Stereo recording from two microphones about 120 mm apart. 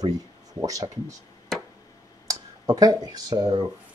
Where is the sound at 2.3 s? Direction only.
30° right (ahead or behind).